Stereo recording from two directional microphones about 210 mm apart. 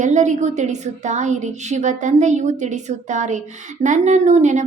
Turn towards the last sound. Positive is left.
turn(degrees=-35)  # may be behind; listen again after turning